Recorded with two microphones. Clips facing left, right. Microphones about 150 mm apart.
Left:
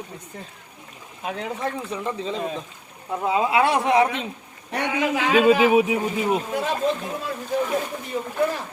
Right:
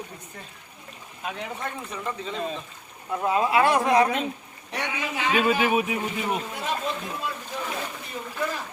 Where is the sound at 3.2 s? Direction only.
20° left (ahead or behind).